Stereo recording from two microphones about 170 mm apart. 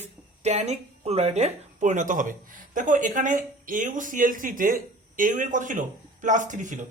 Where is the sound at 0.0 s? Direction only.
40° right (ahead or behind).